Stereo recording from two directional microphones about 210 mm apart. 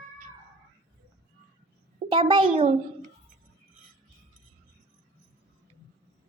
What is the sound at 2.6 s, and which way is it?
Speech, 35° right (ahead or behind).